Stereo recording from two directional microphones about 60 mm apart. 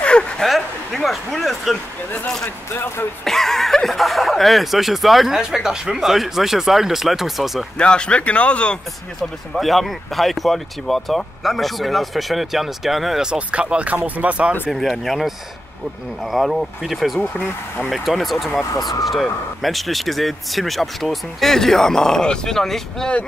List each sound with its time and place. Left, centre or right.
0.0 s a sound: centre
0.4 s speech: centre
2.2 s speech: centre
2.7 s speech: left
3.3 s speech: centre
7.7 s speech: centre
9.2 s speech: centre
13.3 s speech: centre
14.7 s speech: centre